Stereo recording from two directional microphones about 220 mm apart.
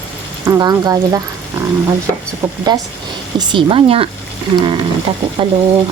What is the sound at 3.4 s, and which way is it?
Speech, 20° right (ahead or behind).